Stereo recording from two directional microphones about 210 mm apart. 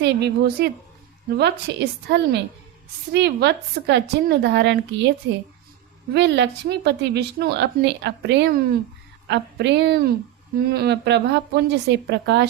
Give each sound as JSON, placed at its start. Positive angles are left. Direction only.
{"t": 0.0, "sound": "a woman's voice", "side_deg": -50}